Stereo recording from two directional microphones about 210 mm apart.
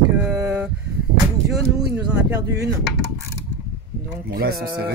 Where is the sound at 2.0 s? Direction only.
5° right (ahead or behind).